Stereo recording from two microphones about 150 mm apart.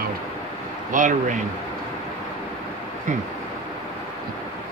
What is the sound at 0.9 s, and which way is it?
Speech, 60° right (ahead or behind).